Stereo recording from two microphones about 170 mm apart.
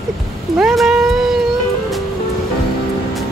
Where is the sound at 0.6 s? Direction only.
Centre (ahead or behind).